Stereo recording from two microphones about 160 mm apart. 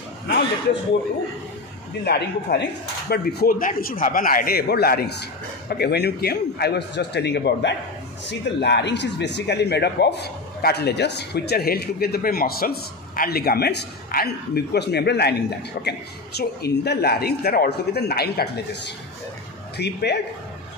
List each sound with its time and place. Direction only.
2.0 s speech: 90° left
5.7 s speech: 90° left
15.8 s speech: 75° left (ahead or behind)
16.3 s speech: 90° left